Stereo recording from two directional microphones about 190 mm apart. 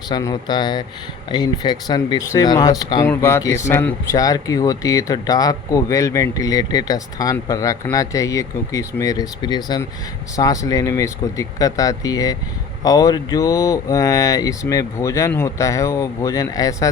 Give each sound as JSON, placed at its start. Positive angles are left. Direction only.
{"t": 0.1, "sound": "speech", "side_deg": 20}